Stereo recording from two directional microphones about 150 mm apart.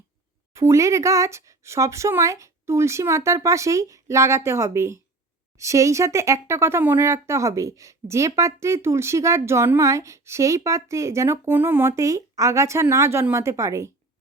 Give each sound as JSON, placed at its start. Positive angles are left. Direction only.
{"t": 0.5, "sound": "speech", "side_deg": -20}